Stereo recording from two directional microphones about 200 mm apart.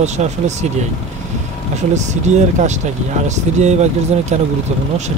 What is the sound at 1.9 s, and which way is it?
Speech, 35° right (ahead or behind).